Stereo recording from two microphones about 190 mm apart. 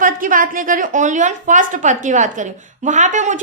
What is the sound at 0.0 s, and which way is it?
A woman's voice, 45° right (ahead or behind).